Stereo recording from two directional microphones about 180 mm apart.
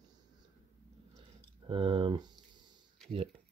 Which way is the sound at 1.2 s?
30° right (ahead or behind).